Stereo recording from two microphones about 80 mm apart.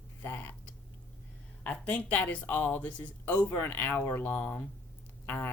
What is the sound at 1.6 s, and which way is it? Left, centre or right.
Speech, centre.